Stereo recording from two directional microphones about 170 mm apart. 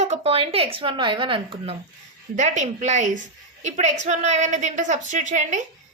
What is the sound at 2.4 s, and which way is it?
A woman's voice, 45° right (ahead or behind).